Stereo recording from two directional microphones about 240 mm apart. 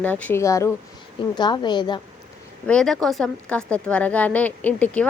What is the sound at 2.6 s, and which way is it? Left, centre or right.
Speech, centre.